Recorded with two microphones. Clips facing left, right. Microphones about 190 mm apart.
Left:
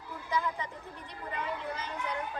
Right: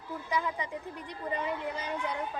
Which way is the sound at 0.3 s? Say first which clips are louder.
Even; 15° right (ahead or behind).